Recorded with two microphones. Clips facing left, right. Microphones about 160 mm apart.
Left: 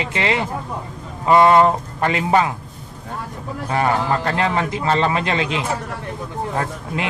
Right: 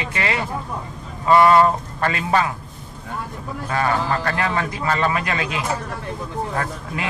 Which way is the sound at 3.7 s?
20° left (ahead or behind).